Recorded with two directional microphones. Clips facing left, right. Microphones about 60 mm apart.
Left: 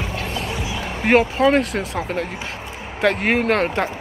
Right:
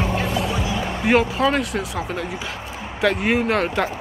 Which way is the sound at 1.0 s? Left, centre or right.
Left.